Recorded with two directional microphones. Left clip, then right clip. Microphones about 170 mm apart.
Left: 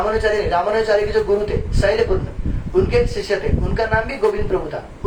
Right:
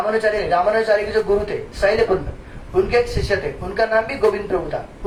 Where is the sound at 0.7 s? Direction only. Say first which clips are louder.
Left 1 dB; 20° left (ahead or behind).